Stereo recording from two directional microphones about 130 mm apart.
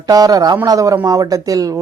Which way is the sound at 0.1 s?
30° right (ahead or behind).